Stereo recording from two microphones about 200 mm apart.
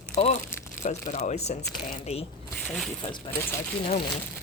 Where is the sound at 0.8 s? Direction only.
35° left (ahead or behind).